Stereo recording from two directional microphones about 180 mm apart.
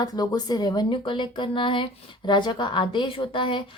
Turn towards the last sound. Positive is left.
turn(degrees=25)  # may be behind; listen again after turning